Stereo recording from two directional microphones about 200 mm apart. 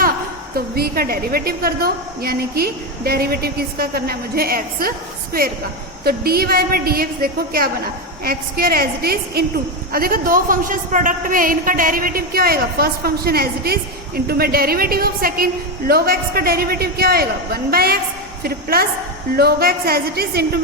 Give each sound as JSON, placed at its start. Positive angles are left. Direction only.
{"t": 0.5, "sound": "a woman's voice", "side_deg": -50}